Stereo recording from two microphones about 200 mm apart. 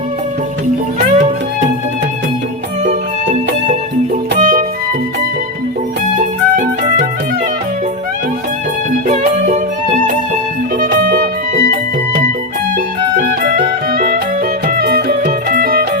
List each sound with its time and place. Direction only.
0.9 s music: 35° right (ahead or behind)
2.8 s music: 35° right (ahead or behind)
6.1 s music: 40° right (ahead or behind)
9.0 s music: 35° right (ahead or behind)
12.7 s music: 45° right (ahead or behind)